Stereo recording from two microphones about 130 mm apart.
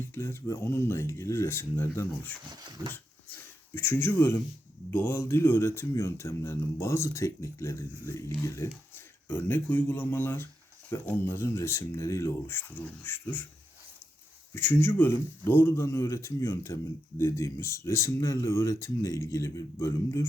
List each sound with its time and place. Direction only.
0.0 s speech: 20° left (ahead or behind)
2.6 s dog: 30° right (ahead or behind)
3.8 s speech: 15° left (ahead or behind)
14.5 s speech: 15° left (ahead or behind)